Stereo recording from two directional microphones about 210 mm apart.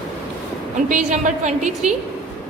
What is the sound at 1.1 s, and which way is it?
Speech, 35° right (ahead or behind).